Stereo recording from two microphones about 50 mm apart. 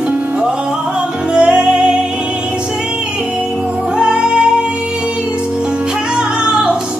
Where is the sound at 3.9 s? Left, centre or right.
Centre.